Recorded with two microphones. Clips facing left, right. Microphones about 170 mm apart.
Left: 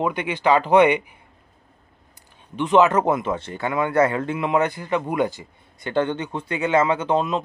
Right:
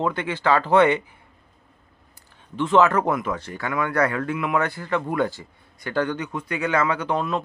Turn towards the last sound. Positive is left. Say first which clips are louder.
# left 3 dB
turn(degrees=20)  # may be behind; listen again after turning